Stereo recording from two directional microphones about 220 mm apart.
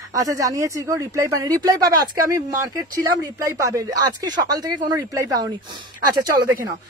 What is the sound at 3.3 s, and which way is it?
A woman's voice, 15° right (ahead or behind).